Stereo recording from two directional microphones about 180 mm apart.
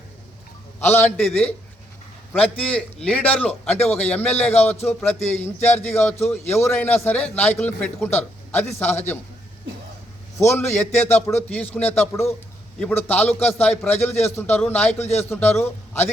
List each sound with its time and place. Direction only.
0.8 s a man's voice: 10° left (ahead or behind)
10.3 s a man's voice: 15° left (ahead or behind)